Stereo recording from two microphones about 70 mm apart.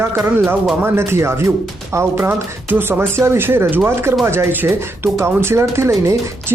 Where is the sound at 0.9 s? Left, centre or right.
Right.